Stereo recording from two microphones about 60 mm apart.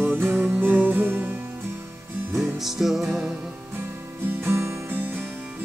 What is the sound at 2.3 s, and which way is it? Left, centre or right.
Music, centre.